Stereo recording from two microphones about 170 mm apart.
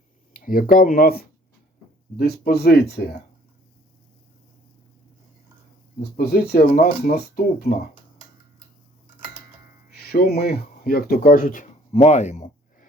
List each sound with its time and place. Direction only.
0.3 s speech: 55° left (ahead or behind)
6.1 s speech: 65° left (ahead or behind)
9.9 s speech: 65° left (ahead or behind); by 12.9 s 45° left (ahead or behind)